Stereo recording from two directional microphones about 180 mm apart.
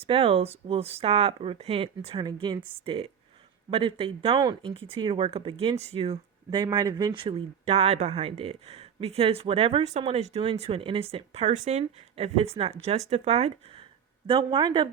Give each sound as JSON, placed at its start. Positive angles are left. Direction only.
{"t": 0.0, "sound": "speech", "side_deg": -30}